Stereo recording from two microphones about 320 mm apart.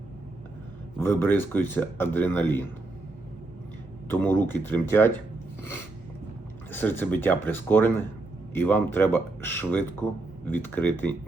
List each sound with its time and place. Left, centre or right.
0.9 s speech: centre
4.1 s speech: centre
6.7 s speech: centre